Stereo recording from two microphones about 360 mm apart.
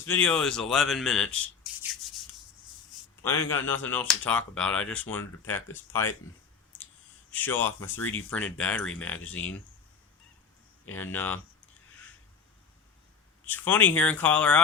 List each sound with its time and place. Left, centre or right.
0.0 s speech: centre
2.0 s rub: centre
3.2 s speech: centre
6.7 s snort: centre
7.3 s speech: centre
10.8 s speech: centre
13.4 s speech: centre